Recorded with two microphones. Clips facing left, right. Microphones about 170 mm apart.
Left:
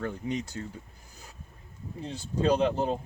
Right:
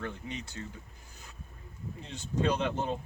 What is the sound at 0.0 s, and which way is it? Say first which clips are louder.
Speech: left 7 dB; 40° left (ahead or behind).